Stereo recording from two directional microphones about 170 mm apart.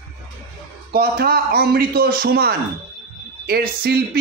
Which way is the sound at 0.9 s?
60° right (ahead or behind).